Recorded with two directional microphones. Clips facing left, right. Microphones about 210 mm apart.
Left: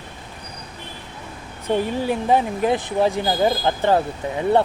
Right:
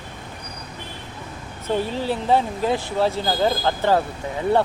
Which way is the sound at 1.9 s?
15° left (ahead or behind).